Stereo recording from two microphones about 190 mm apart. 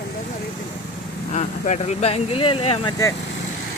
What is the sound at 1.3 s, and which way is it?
Speech, 35° left (ahead or behind).